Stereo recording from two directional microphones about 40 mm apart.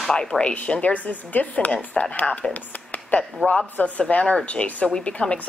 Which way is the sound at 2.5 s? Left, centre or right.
Left.